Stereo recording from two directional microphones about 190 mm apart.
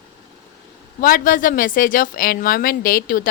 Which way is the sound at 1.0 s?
45° left (ahead or behind).